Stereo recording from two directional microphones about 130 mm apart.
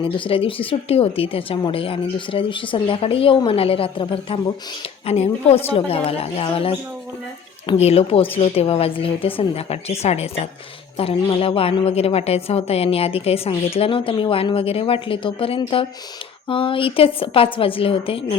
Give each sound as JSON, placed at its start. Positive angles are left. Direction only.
{"t": 0.0, "sound": "speech", "side_deg": 45}
{"t": 5.0, "sound": "speech", "side_deg": 55}
{"t": 7.8, "sound": "speech", "side_deg": 50}